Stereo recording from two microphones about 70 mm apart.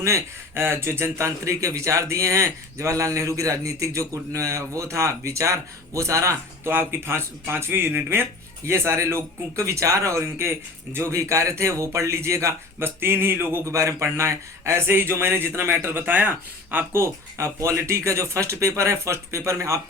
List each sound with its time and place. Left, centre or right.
0.0 s a man's voice: right
13.7 s speech: right
16.9 s a man's voice: right